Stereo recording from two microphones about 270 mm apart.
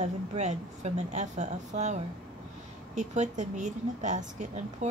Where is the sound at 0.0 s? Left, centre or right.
Right.